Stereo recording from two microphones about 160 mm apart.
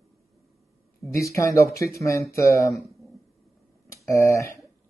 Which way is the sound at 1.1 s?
20° left (ahead or behind).